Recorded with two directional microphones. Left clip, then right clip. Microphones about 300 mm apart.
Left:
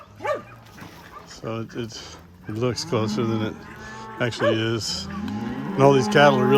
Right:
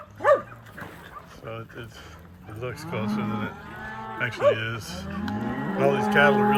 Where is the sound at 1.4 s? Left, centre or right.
Centre.